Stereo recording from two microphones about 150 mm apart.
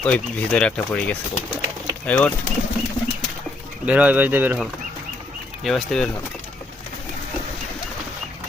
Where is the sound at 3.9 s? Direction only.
10° right (ahead or behind).